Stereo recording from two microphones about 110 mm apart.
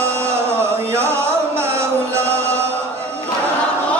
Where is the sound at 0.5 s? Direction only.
25° right (ahead or behind).